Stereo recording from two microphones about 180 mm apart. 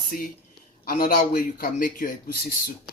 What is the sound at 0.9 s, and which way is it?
Speech, 50° left (ahead or behind).